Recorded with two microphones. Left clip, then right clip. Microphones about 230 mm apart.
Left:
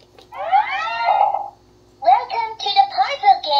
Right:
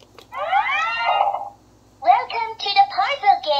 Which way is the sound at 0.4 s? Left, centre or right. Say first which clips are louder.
Left 2 dB; centre.